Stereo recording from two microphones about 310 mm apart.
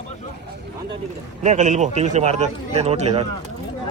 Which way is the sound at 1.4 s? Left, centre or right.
Right.